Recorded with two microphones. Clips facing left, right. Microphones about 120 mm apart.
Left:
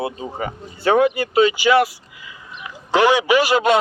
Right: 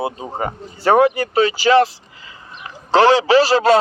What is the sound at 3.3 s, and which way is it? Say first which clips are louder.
Speech: right 3 dB; 35° right (ahead or behind).